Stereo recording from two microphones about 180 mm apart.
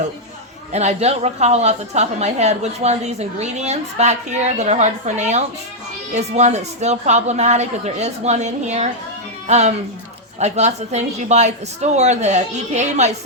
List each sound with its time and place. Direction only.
0.7 s a woman's voice: 40° right (ahead or behind)